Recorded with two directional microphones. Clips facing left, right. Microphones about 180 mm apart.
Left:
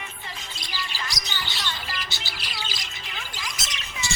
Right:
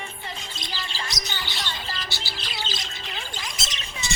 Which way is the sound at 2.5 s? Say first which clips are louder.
Right 4 dB; 25° right (ahead or behind).